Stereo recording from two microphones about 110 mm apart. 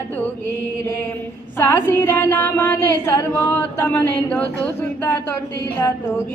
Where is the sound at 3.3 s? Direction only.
15° left (ahead or behind).